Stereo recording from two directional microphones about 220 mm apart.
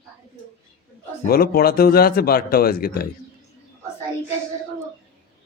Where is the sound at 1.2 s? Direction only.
45° left (ahead or behind).